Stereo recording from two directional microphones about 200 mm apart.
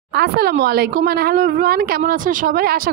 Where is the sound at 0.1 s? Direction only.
50° right (ahead or behind).